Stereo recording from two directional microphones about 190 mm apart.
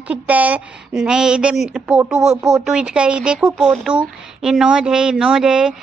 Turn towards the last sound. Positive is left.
turn(degrees=-5)  # may be behind; listen again after turning